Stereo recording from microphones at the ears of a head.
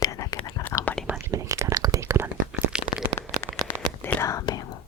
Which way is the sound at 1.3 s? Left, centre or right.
Right.